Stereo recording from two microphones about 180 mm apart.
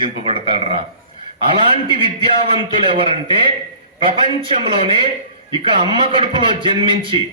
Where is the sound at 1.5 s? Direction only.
30° right (ahead or behind).